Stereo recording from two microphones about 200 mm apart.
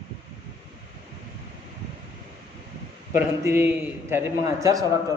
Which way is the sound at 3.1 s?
10° right (ahead or behind).